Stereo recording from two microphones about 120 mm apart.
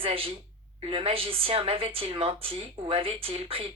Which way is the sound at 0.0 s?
50° right (ahead or behind).